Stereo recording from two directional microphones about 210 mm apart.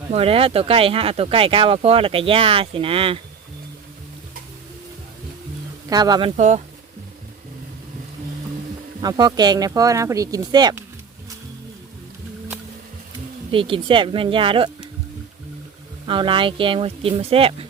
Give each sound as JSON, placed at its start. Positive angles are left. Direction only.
{"t": 0.1, "sound": "speech", "side_deg": -25}
{"t": 5.9, "sound": "speech", "side_deg": -20}
{"t": 6.3, "sound": "speech", "side_deg": -35}
{"t": 9.0, "sound": "speech", "side_deg": -20}
{"t": 13.5, "sound": "speech", "side_deg": -25}
{"t": 16.0, "sound": "speech", "side_deg": -25}